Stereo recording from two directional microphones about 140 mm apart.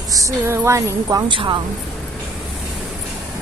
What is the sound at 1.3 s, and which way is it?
Speech, 35° right (ahead or behind).